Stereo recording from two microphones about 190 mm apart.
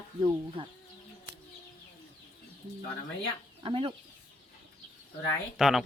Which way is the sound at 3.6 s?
25° right (ahead or behind).